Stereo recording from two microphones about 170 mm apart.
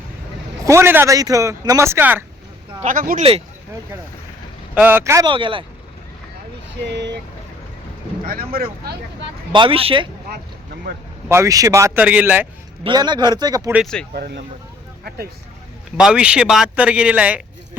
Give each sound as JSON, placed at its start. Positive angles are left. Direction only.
{"t": 0.6, "sound": "speech", "side_deg": -15}
{"t": 2.8, "sound": "speech", "side_deg": -55}
{"t": 4.7, "sound": "speech", "side_deg": -10}
{"t": 5.2, "sound": "a man's voice", "side_deg": -30}
{"t": 6.9, "sound": "speech", "side_deg": -90}
{"t": 8.2, "sound": "speech", "side_deg": -60}
{"t": 9.5, "sound": "a man's voice", "side_deg": -30}
{"t": 11.3, "sound": "speech", "side_deg": -15}
{"t": 12.8, "sound": "a man's voice", "side_deg": -25}
{"t": 13.8, "sound": "speech", "side_deg": 5}
{"t": 14.1, "sound": "speech", "side_deg": -70}
{"t": 16.0, "sound": "speech", "side_deg": -5}